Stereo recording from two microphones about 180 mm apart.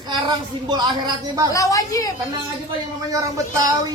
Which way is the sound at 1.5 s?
20° left (ahead or behind).